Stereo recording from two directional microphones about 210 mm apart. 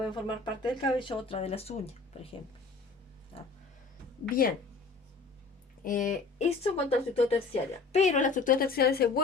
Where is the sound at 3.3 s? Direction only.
25° left (ahead or behind).